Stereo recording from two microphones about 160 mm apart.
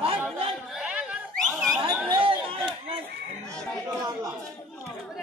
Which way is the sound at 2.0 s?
30° right (ahead or behind).